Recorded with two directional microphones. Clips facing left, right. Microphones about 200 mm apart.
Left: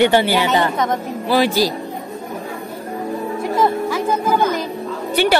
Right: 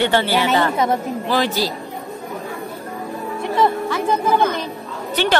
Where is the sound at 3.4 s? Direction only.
5° left (ahead or behind).